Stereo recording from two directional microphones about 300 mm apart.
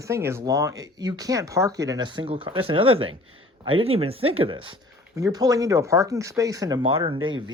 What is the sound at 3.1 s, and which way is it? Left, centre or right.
Speech, right.